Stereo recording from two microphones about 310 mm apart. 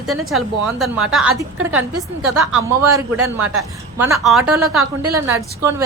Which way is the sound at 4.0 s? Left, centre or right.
Centre.